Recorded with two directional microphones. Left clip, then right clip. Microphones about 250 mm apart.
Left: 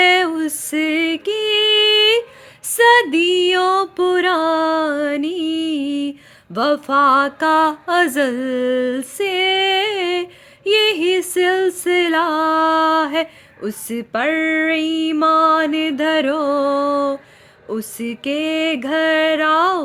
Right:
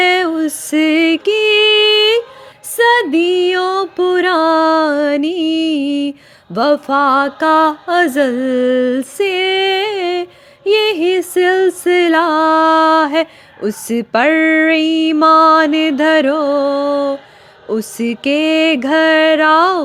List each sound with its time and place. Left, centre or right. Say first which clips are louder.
0.0 s female singing: right 1 dB; centre
2.7 s music: right 1 dB; centre
17.7 s music: right 7 dB; centre